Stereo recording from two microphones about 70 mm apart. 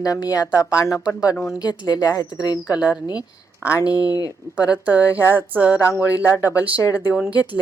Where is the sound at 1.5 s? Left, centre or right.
Left.